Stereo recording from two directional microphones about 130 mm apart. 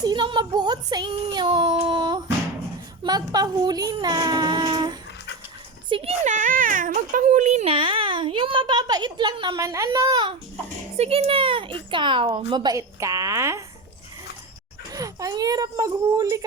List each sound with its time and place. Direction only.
0.0 s child singing: 35° right (ahead or behind)
3.0 s speech: 30° right (ahead or behind)
5.9 s speech: 45° right (ahead or behind)
6.2 s speech: 90° right; by 7.7 s 60° right (ahead or behind)
7.7 s speech: 45° right (ahead or behind)
9.6 s speech: 25° right (ahead or behind)
10.9 s speech: 50° right (ahead or behind); by 13.6 s 20° right (ahead or behind)
14.9 s speech: 25° right (ahead or behind)